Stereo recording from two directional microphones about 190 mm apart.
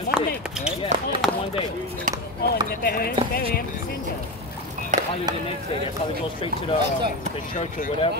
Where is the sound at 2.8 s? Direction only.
55° left (ahead or behind).